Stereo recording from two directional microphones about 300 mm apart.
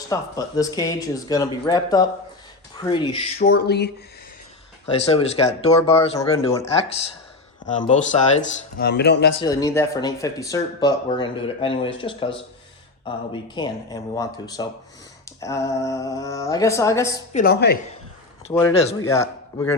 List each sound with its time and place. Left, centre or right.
0.1 s speech: centre
3.3 s speech: left
4.9 s speech: centre
8.4 s speech: left
9.4 s speech: centre
17.3 s speech: left
18.9 s a man's voice: centre